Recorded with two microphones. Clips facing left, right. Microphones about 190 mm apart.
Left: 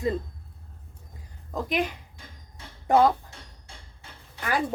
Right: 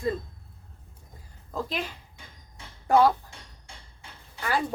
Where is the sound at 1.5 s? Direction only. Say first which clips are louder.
Left 3 dB; 15° left (ahead or behind).